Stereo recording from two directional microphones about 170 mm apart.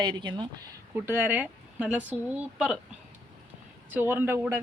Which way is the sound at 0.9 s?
10° right (ahead or behind).